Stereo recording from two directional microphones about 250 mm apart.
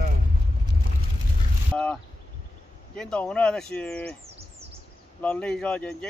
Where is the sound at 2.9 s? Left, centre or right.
Centre.